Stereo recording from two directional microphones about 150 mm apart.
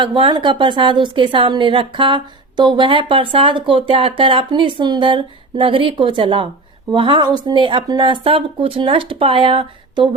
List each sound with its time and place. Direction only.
0.0 s a woman's voice: 35° right (ahead or behind)